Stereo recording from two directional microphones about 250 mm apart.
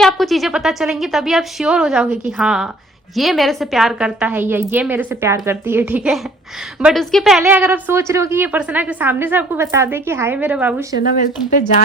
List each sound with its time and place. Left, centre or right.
0.0 s a woman's voice: centre
11.0 s speech: left